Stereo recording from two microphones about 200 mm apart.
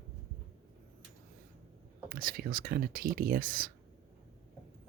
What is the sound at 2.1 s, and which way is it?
Speech, 45° right (ahead or behind).